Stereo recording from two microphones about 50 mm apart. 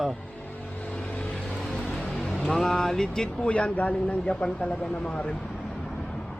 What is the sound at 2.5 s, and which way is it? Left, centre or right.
Speech, centre.